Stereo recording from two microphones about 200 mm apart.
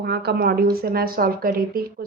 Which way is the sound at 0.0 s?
55° right (ahead or behind).